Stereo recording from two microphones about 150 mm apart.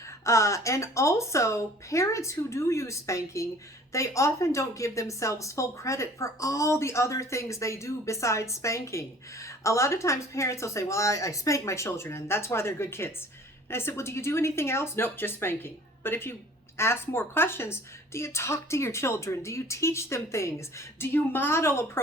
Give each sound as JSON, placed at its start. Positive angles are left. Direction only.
{"t": 0.3, "sound": "a woman's voice", "side_deg": 20}